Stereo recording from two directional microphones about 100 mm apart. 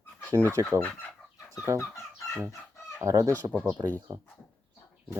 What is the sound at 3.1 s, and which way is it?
Speech, 35° right (ahead or behind).